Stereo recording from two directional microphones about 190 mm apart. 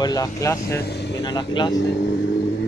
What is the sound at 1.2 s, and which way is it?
Speech, 25° left (ahead or behind).